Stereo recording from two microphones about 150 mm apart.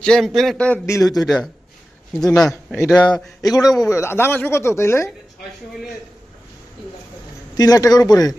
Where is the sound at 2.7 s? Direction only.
20° left (ahead or behind).